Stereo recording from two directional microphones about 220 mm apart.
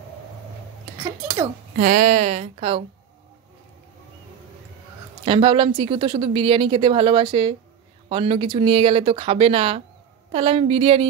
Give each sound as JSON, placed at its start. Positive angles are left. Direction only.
{"t": 1.8, "sound": "speech", "side_deg": -35}
{"t": 5.2, "sound": "speech", "side_deg": -25}